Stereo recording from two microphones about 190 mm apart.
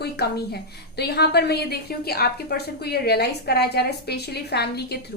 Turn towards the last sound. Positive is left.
turn(degrees=60)  # may be behind; listen again after turning